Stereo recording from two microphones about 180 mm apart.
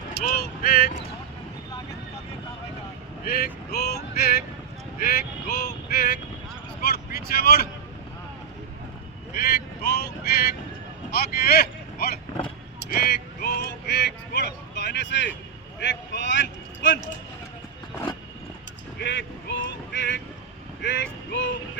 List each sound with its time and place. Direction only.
0.3 s vehicle: 55° left (ahead or behind)
3.2 s speech: 60° left (ahead or behind)
4.9 s vehicle: 55° left (ahead or behind)
6.8 s speech: 60° left (ahead or behind)
9.8 s speech: 60° left (ahead or behind); by 17.0 s 90° left
18.9 s speech: 80° left